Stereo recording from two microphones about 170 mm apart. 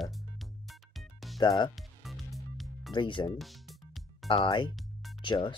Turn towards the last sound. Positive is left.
turn(degrees=30)  # may be behind; listen again after turning